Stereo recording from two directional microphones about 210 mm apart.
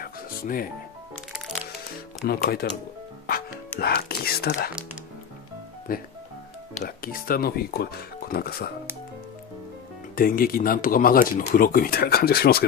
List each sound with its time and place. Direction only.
0.0 s music: 45° left (ahead or behind)
2.2 s speech: 45° left (ahead or behind)
3.8 s speech: 50° left (ahead or behind)
5.9 s speech: 45° left (ahead or behind)
10.1 s speech: 45° left (ahead or behind)